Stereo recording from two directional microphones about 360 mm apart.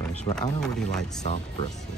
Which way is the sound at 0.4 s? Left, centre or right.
Centre.